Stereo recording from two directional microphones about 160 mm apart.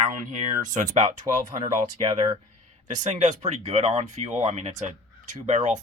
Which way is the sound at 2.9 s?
50° right (ahead or behind).